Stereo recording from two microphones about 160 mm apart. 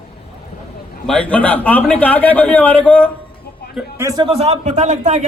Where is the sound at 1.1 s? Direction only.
10° left (ahead or behind).